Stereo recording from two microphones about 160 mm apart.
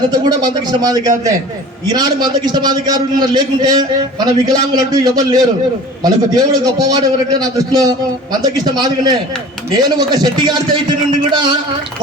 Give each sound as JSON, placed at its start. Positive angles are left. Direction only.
{"t": 0.1, "sound": "a man's voice", "side_deg": -25}